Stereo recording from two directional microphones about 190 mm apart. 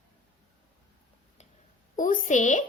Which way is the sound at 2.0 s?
45° left (ahead or behind).